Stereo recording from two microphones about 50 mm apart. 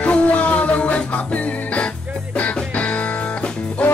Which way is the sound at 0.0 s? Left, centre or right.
Left.